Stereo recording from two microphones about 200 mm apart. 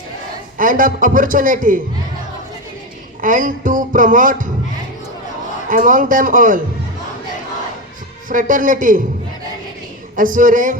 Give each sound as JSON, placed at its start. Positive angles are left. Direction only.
{"t": 0.5, "sound": "a man's voice", "side_deg": -45}
{"t": 3.2, "sound": "speech", "side_deg": -40}
{"t": 5.6, "sound": "speech", "side_deg": -40}
{"t": 8.3, "sound": "speech", "side_deg": -40}
{"t": 10.2, "sound": "speech", "side_deg": -40}